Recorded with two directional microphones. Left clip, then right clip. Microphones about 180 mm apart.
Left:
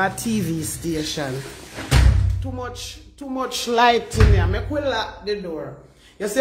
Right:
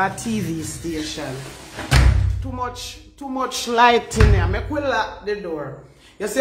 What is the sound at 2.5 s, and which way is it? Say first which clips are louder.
Speech: right 4 dB; 10° left (ahead or behind).